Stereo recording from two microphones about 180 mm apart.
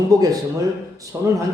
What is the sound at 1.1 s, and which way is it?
Speech, 15° right (ahead or behind).